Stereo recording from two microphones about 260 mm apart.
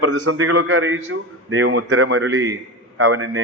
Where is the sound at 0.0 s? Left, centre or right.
Right.